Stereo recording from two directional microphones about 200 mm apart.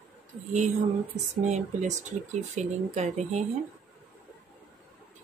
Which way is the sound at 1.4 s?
35° right (ahead or behind).